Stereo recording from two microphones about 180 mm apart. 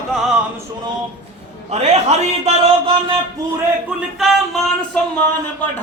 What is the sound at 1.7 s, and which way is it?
Speech, 35° right (ahead or behind).